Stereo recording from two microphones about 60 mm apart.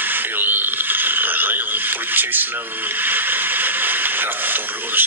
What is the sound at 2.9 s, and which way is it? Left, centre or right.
Speech, right.